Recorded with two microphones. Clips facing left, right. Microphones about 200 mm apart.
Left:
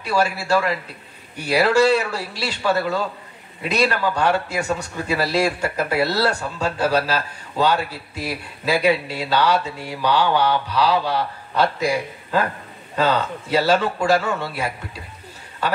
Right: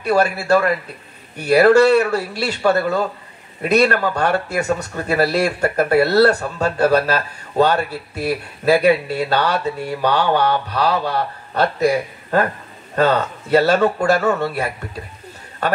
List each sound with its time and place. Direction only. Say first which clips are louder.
0.0 s a man's voice: right 4 dB; 60° right (ahead or behind)